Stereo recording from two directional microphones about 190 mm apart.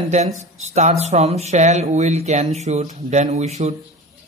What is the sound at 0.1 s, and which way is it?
A man's voice, 35° right (ahead or behind).